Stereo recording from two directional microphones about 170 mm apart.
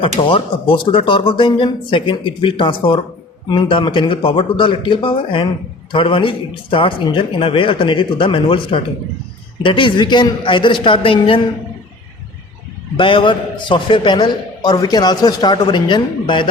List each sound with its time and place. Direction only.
0.3 s a man's voice: 30° left (ahead or behind)
13.0 s a man's voice: 30° left (ahead or behind)